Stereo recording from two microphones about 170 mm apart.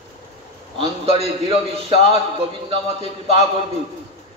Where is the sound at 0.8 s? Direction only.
35° right (ahead or behind).